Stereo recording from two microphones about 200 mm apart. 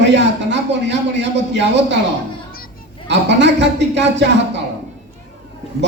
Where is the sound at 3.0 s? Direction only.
60° right (ahead or behind).